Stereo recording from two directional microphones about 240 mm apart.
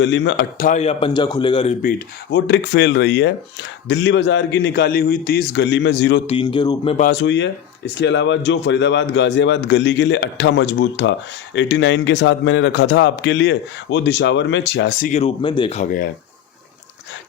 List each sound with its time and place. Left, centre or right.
0.0 s speech: left
0.6 s a man's voice: left
2.3 s speech: left
6.2 s a man's voice: left
6.9 s speech: left
15.1 s a man's voice: left